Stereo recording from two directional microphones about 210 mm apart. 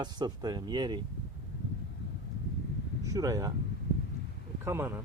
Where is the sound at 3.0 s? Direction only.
15° right (ahead or behind).